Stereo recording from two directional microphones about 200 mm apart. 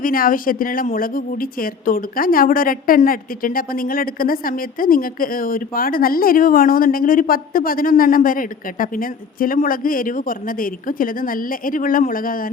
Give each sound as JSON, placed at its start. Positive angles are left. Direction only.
{"t": 0.0, "sound": "speech", "side_deg": 45}